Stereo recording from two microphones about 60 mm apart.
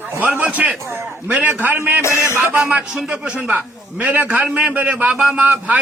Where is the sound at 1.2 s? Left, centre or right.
Right.